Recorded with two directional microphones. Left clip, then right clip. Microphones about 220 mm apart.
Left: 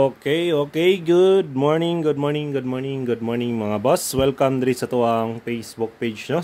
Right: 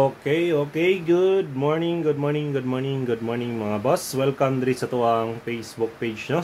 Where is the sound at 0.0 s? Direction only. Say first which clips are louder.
Left 2 dB; 40° left (ahead or behind).